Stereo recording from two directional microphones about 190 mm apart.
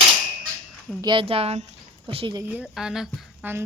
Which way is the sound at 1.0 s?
25° right (ahead or behind).